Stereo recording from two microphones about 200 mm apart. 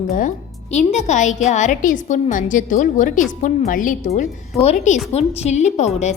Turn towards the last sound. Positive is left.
turn(degrees=35)  # may be behind; listen again after turning